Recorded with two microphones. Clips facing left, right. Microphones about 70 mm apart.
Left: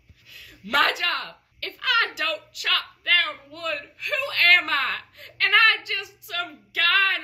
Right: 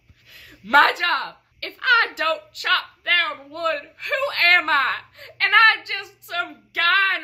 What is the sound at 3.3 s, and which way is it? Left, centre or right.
A woman's voice, right.